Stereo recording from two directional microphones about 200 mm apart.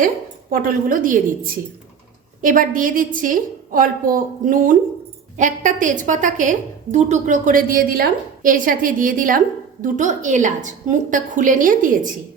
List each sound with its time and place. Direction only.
0.5 s a woman's voice: 45° right (ahead or behind)